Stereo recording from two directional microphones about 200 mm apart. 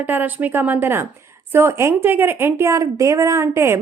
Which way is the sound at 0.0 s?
10° right (ahead or behind).